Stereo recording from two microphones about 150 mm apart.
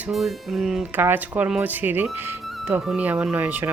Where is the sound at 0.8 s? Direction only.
15° right (ahead or behind).